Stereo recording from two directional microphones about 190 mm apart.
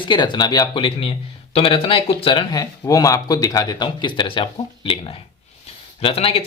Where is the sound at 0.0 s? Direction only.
25° left (ahead or behind).